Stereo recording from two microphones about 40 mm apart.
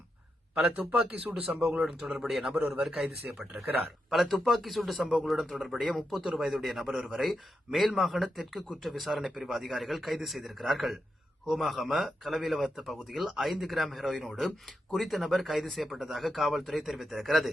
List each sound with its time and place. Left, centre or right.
0.5 s a man's voice: right
1.5 s speech: centre
1.8 s speech: centre
3.3 s speech: right
4.1 s speech: centre